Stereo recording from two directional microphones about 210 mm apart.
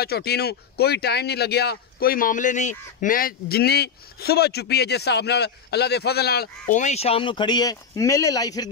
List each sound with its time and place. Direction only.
0.0 s speech: 50° left (ahead or behind)
6.7 s speech: 35° left (ahead or behind); by 8.6 s 15° left (ahead or behind)